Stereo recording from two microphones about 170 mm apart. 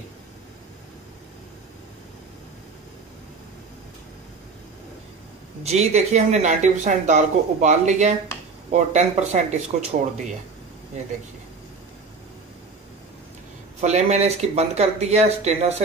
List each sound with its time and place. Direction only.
5.6 s speech: 40° right (ahead or behind)
13.7 s speech: 40° right (ahead or behind)